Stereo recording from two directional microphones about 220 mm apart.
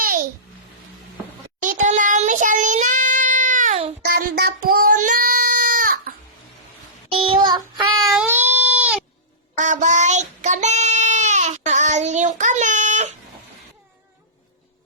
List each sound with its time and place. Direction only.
0.0 s babbling: 40° right (ahead or behind)
1.6 s child singing: 35° right (ahead or behind)
4.1 s child singing: 40° right (ahead or behind)
4.7 s a sound: 40° right (ahead or behind)
7.4 s child singing: 20° right (ahead or behind)
8.1 s baby cry: 5° right (ahead or behind)
9.6 s child singing: 35° right (ahead or behind)